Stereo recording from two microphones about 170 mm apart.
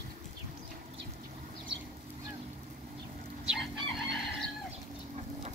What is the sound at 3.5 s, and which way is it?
Chicken, centre (ahead or behind).